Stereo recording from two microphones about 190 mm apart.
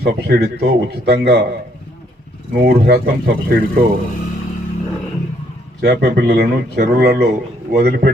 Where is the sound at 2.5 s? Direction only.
55° right (ahead or behind).